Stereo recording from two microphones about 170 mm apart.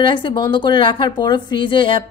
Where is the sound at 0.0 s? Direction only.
30° left (ahead or behind).